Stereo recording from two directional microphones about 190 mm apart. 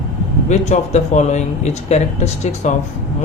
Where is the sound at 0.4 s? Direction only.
40° left (ahead or behind).